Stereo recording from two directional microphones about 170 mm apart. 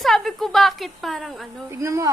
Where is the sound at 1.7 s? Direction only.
15° right (ahead or behind).